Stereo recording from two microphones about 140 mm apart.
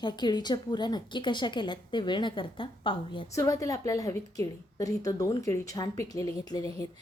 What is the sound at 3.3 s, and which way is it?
A woman's voice, 20° left (ahead or behind).